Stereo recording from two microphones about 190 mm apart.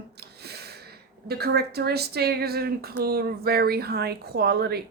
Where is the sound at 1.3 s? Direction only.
55° right (ahead or behind).